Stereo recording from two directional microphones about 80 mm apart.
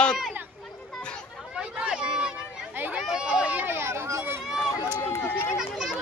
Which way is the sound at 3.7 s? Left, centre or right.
Right.